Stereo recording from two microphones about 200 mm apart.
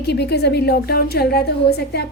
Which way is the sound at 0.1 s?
55° left (ahead or behind).